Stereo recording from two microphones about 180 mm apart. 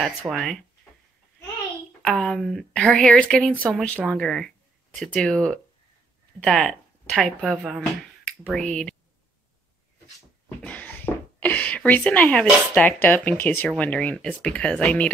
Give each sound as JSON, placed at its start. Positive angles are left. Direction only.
{"t": 0.3, "sound": "speech", "side_deg": 0}
{"t": 2.0, "sound": "speech", "side_deg": 0}
{"t": 10.6, "sound": "a sound", "side_deg": 10}
{"t": 11.3, "sound": "speech", "side_deg": 10}